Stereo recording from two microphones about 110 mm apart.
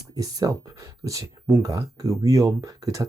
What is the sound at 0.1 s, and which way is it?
Speech, 35° right (ahead or behind).